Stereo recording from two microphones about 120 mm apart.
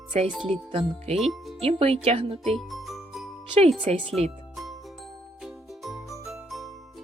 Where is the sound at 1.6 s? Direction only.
55° right (ahead or behind).